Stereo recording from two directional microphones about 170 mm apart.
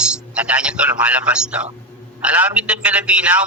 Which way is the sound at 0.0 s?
5° right (ahead or behind).